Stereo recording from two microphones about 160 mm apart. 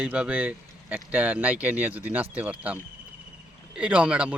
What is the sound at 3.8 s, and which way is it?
Speech, 10° right (ahead or behind).